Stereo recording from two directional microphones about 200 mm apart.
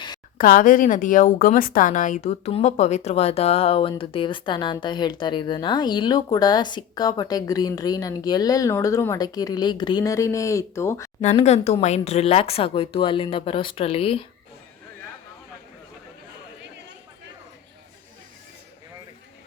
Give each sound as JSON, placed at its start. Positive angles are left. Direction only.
{"t": 0.3, "sound": "speech", "side_deg": 45}
{"t": 11.2, "sound": "speech", "side_deg": 35}